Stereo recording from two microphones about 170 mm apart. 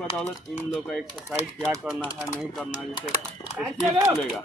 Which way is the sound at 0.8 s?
Centre (ahead or behind).